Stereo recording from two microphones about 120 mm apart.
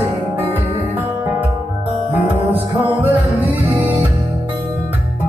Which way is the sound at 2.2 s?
15° right (ahead or behind).